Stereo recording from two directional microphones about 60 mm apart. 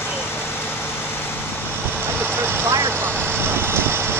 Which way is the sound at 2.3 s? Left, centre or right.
Right.